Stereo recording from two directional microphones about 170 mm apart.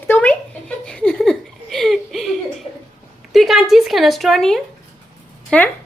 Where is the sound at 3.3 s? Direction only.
Centre (ahead or behind).